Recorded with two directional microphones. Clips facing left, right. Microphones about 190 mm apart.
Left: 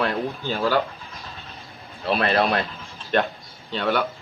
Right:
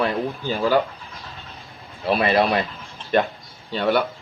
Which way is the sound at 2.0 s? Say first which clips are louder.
Right 2 dB; 10° right (ahead or behind).